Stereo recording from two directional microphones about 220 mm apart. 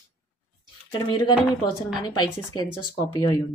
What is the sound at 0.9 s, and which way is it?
A woman's voice, 20° left (ahead or behind).